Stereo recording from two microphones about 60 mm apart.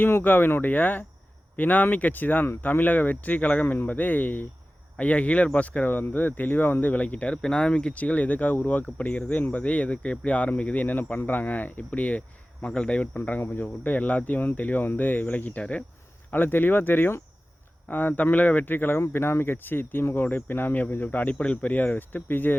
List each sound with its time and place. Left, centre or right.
0.0 s speech: left